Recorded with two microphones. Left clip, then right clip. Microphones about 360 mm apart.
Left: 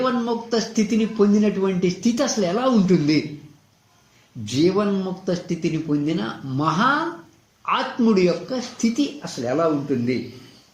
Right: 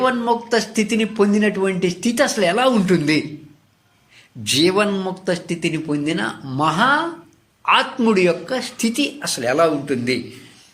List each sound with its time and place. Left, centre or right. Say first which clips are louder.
0.0 s a man's voice: right 5 dB; right
4.4 s a man's voice: right 4 dB; right